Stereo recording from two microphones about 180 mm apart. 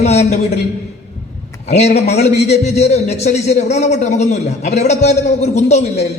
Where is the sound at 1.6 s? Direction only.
35° left (ahead or behind).